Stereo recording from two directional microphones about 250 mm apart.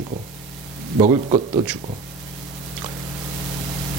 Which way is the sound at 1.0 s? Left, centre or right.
Centre.